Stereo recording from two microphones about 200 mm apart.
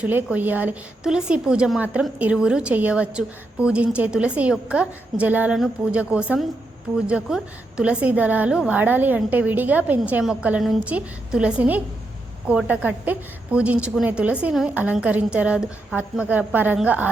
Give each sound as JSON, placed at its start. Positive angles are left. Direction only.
{"t": 0.0, "sound": "a woman's voice", "side_deg": -10}